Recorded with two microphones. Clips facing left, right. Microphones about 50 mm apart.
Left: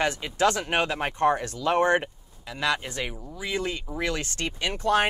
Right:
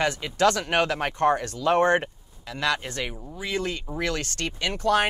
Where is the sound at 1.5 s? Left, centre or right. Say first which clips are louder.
Right 2 dB; right.